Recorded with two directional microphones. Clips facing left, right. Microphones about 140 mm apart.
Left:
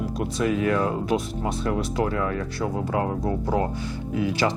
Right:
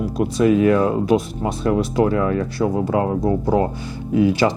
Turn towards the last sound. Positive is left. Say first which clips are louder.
# right 8 dB
turn(degrees=-15)  # may be behind; listen again after turning